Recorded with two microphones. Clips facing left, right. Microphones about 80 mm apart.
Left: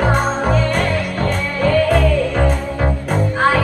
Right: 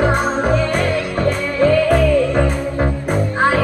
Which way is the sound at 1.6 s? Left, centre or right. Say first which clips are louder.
Right 2 dB; right.